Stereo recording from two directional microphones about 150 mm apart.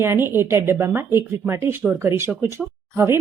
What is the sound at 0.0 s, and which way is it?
Speech, 15° right (ahead or behind).